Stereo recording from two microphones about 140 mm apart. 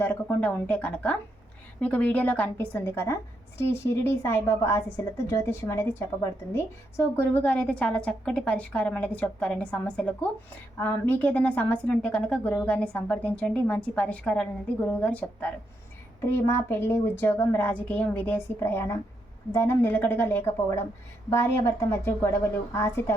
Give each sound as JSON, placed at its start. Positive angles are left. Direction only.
{"t": 0.0, "sound": "a woman's voice", "side_deg": 15}